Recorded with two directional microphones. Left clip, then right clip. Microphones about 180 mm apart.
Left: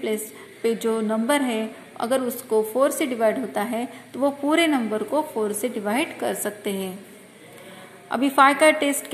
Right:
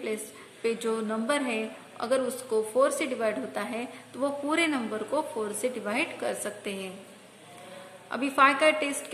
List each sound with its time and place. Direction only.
0.0 s a woman's voice: 10° left (ahead or behind)
8.1 s a woman's voice: 15° left (ahead or behind)